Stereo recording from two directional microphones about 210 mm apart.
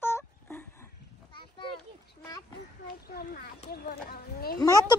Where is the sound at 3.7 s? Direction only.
45° left (ahead or behind).